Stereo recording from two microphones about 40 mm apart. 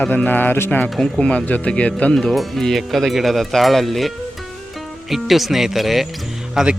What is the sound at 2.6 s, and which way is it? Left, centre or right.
Speech, centre.